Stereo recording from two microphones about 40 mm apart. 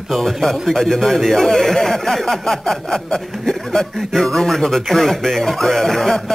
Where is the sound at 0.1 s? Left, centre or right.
Centre.